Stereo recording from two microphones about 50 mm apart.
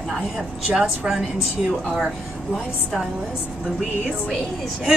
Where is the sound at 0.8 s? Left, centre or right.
Centre.